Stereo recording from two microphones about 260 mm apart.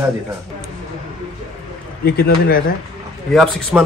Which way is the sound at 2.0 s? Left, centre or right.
Left.